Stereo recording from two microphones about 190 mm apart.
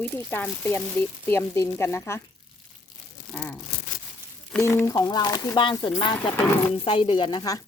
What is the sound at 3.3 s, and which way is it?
Tearing, 5° left (ahead or behind).